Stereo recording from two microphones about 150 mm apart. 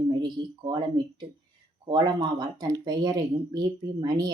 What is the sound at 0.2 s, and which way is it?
Speech, 30° right (ahead or behind).